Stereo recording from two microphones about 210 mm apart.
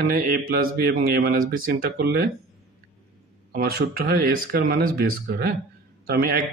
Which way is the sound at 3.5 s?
45° right (ahead or behind).